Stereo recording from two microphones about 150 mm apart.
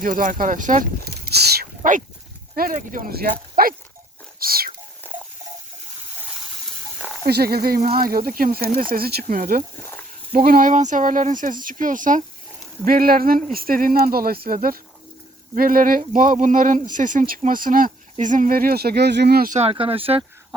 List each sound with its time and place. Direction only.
0.0 s speech: 60° right (ahead or behind)
4.4 s whispering: 80° right
7.3 s speech: 90° right; by 12.2 s 60° right (ahead or behind)
12.8 s speech: 75° right (ahead or behind)
19.7 s speech: 40° right (ahead or behind)